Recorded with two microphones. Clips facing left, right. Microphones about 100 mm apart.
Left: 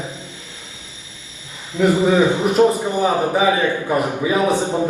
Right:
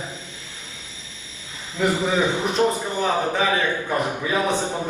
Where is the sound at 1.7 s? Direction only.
15° left (ahead or behind).